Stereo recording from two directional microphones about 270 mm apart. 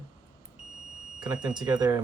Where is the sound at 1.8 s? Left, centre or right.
Centre.